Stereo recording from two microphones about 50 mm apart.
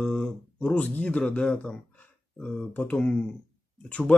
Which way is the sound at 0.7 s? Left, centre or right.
Left.